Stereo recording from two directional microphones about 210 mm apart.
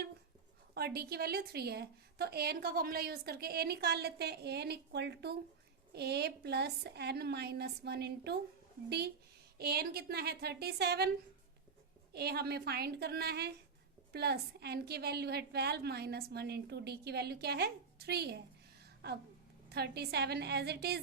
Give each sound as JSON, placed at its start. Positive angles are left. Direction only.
{"t": 0.7, "sound": "a woman's voice", "side_deg": -50}
{"t": 9.6, "sound": "a woman's voice", "side_deg": -50}
{"t": 12.1, "sound": "a woman's voice", "side_deg": -50}